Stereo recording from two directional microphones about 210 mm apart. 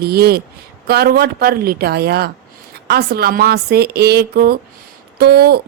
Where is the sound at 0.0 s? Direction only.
50° right (ahead or behind).